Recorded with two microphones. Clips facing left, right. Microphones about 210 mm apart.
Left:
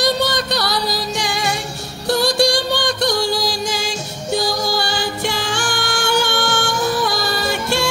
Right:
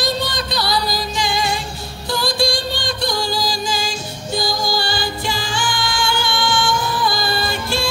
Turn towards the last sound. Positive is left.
turn(degrees=70)  # may be behind; listen again after turning